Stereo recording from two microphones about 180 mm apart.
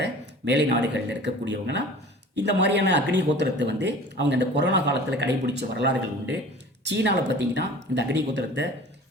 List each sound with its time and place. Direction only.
0.0 s speech: 75° right (ahead or behind)